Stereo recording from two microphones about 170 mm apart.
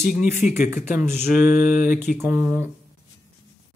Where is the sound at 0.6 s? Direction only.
45° left (ahead or behind).